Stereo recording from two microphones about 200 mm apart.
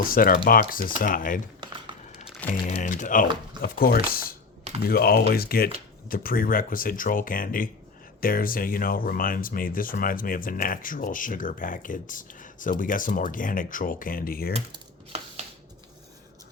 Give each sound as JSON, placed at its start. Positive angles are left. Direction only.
{"t": 0.0, "sound": "speech", "side_deg": 45}
{"t": 2.2, "sound": "music", "side_deg": 0}
{"t": 2.5, "sound": "speech", "side_deg": 40}